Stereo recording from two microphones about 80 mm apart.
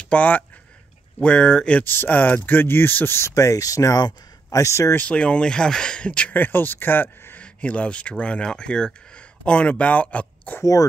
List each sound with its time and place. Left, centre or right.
0.0 s speech: centre
1.9 s speech: left
4.9 s speech: centre
10.6 s speech: left